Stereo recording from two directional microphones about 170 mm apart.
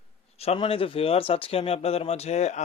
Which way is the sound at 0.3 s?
35° left (ahead or behind).